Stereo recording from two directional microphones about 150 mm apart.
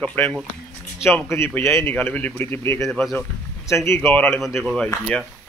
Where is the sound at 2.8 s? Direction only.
5° left (ahead or behind).